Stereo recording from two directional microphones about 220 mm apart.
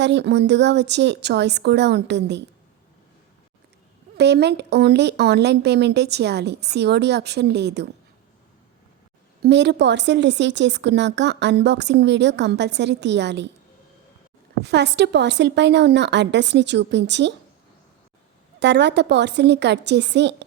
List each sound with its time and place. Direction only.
0.0 s a woman's voice: 50° right (ahead or behind)
4.2 s a woman's voice: 50° right (ahead or behind)
9.4 s a woman's voice: 50° right (ahead or behind)
14.6 s a woman's voice: 50° right (ahead or behind)
18.6 s a woman's voice: 50° right (ahead or behind)